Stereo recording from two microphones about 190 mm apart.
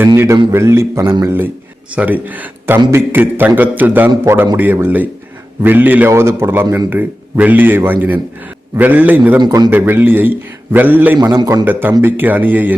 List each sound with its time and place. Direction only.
0.0 s a man's voice: 15° right (ahead or behind)
9.4 s a man's voice: 20° right (ahead or behind)
11.3 s a man's voice: 20° right (ahead or behind)